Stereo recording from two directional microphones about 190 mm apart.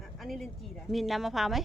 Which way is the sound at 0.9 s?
Centre (ahead or behind).